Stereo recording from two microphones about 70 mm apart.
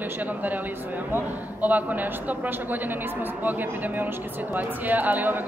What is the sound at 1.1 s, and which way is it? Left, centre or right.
A man's voice, right.